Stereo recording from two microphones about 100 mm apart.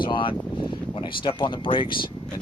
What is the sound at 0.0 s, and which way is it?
Speech, 55° left (ahead or behind).